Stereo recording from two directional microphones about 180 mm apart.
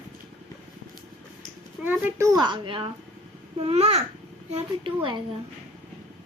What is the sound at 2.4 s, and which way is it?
A child's voice, 25° right (ahead or behind).